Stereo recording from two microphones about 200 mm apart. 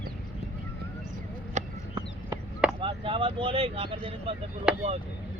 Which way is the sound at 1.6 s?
35° right (ahead or behind).